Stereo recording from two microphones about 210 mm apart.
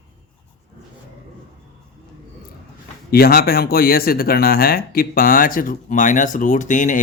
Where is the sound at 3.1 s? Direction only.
45° left (ahead or behind).